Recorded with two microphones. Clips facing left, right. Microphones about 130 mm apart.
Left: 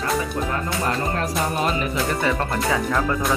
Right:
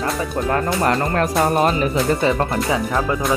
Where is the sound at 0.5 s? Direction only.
60° right (ahead or behind); by 1.9 s 45° right (ahead or behind).